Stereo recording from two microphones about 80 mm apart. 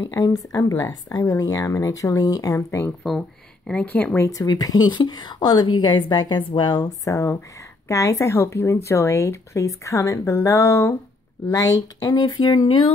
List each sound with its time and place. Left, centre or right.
0.1 s speech: left
3.0 s speech: centre
3.8 s speech: left
4.3 s a woman's voice: left
6.9 s speech: left
11.4 s a woman's voice: left